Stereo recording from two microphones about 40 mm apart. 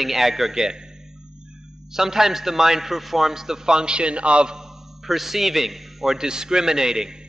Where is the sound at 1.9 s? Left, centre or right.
Centre; by 4.5 s right.